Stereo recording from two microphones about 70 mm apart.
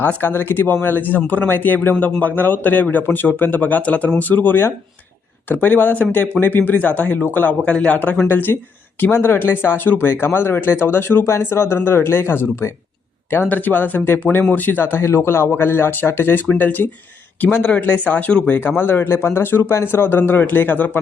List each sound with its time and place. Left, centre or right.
0.0 s speech: left
18.8 s speech: left